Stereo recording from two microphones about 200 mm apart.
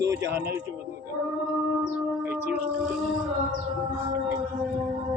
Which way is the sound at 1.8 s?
10° right (ahead or behind).